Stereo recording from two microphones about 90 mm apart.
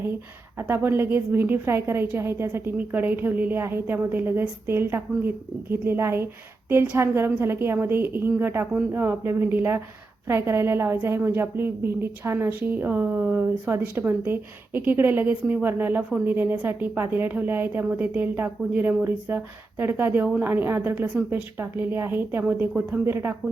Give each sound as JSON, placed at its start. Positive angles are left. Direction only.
{"t": 0.7, "sound": "a woman's voice", "side_deg": -25}